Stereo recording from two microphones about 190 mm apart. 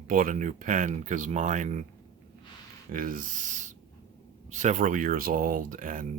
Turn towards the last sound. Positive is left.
turn(degrees=-45)  # may be behind; listen again after turning